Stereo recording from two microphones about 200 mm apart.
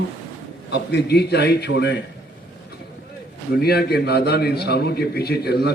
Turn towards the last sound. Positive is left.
turn(degrees=55)  # may be behind; listen again after turning